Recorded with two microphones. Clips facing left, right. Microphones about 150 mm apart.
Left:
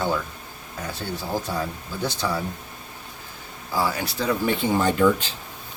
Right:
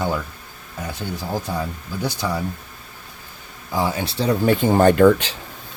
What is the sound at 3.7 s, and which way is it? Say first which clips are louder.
Speech: right 2 dB; 20° right (ahead or behind).